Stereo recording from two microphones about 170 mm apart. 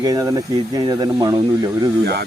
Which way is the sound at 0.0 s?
20° right (ahead or behind).